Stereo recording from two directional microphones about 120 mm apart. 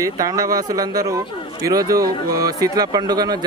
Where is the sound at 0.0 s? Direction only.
30° right (ahead or behind).